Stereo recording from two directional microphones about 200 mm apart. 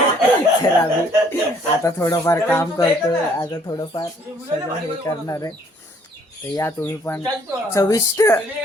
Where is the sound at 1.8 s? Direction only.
15° left (ahead or behind).